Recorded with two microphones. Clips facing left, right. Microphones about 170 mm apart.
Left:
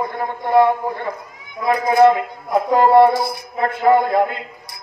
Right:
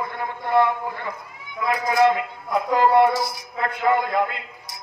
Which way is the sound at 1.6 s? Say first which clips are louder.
Left 5 dB; 30° left (ahead or behind).